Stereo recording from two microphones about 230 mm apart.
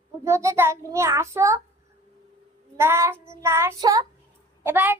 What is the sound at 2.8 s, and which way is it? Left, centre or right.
A child's voice, centre.